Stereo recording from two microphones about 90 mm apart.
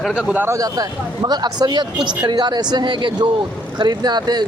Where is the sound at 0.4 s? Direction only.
40° right (ahead or behind).